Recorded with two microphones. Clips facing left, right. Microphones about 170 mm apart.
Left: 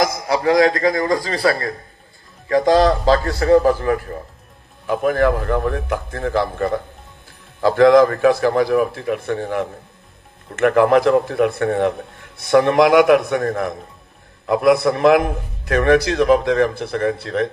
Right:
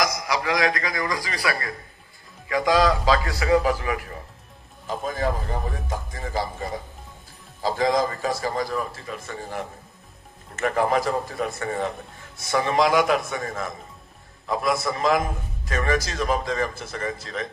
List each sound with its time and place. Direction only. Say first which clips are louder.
0.0 s a man's voice: left 7 dB; 25° left (ahead or behind)
2.4 s a man's voice: left 6 dB; 40° left (ahead or behind)
4.8 s speech: left 10 dB; 65° left (ahead or behind)